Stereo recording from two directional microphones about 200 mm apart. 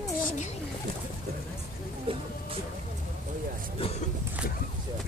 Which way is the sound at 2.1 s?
25° right (ahead or behind).